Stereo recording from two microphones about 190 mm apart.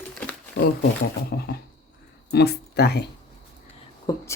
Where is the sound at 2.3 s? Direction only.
55° left (ahead or behind).